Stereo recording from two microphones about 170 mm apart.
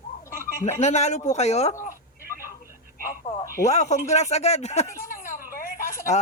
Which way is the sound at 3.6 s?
45° left (ahead or behind).